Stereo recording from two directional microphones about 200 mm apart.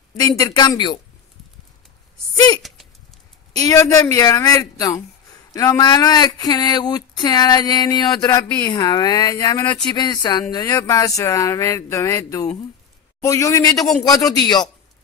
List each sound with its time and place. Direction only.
0.2 s speech: 20° left (ahead or behind)
3.5 s speech: 15° left (ahead or behind)